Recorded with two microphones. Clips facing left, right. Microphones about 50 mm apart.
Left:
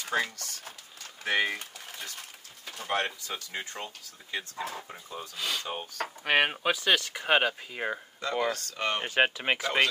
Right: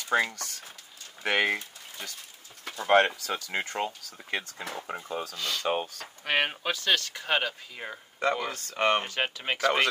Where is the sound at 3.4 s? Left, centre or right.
Right.